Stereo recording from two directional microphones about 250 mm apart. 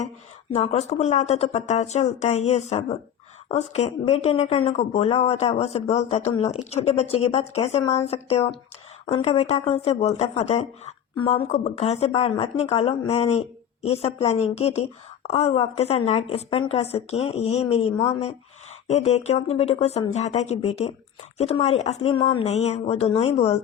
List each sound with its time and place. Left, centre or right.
0.5 s speech: left